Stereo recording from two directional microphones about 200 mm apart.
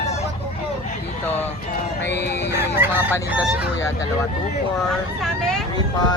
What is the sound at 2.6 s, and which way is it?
Fowl, 10° right (ahead or behind).